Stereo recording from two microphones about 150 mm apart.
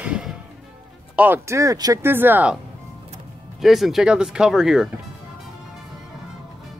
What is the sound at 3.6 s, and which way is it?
Speech, centre (ahead or behind).